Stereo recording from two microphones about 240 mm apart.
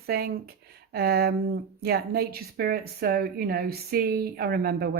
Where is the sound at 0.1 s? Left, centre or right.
Right.